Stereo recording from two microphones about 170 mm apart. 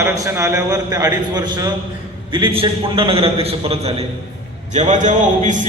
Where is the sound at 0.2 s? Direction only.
15° right (ahead or behind).